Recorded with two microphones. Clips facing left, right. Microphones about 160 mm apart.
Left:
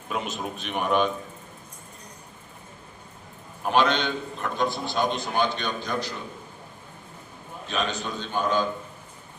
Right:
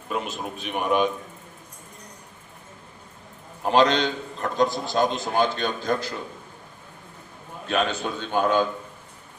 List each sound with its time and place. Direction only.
0.1 s a man's voice: centre (ahead or behind)
3.6 s a man's voice: 35° right (ahead or behind); by 6.1 s 50° right (ahead or behind)
7.7 s a man's voice: 55° right (ahead or behind)